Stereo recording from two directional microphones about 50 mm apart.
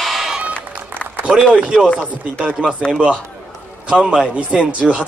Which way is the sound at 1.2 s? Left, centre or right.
Right.